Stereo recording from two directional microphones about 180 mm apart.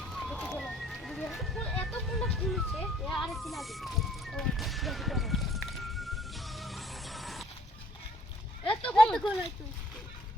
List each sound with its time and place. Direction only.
0.0 s music: 5° left (ahead or behind)
8.8 s speech: 5° left (ahead or behind)